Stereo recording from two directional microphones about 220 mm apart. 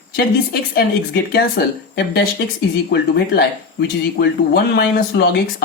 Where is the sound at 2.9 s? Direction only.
50° left (ahead or behind).